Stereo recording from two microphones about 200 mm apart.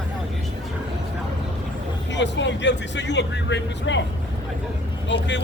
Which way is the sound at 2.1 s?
65° left (ahead or behind).